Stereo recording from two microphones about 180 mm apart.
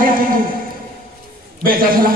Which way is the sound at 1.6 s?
55° right (ahead or behind).